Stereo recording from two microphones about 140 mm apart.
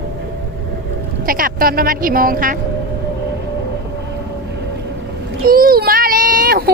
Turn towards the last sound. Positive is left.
turn(degrees=-90)